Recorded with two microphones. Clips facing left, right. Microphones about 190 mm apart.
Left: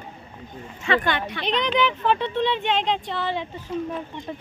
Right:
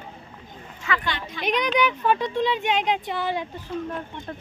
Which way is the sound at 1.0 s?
55° left (ahead or behind).